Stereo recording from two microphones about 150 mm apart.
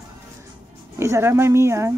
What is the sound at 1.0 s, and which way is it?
Speech, 20° right (ahead or behind).